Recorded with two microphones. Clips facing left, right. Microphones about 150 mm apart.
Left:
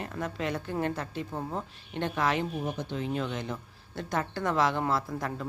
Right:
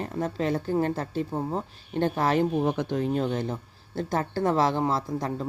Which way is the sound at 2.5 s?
65° right (ahead or behind).